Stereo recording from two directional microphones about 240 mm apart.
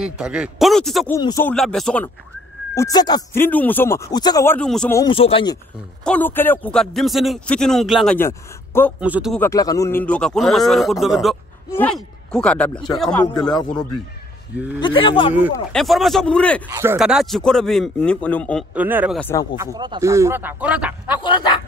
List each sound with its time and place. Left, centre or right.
0.0 s a man's voice: centre
1.1 s a man's voice: centre
2.7 s speech: centre
4.9 s speech: centre
6.0 s a man's voice: centre
9.0 s a man's voice: centre
9.4 s a man's voice: centre
14.8 s a man's voice: left
15.7 s a man's voice: centre
16.6 s a man's voice: centre
18.8 s speech: centre
19.1 s speech: centre
19.6 s speech: centre
21.2 s a man's voice: centre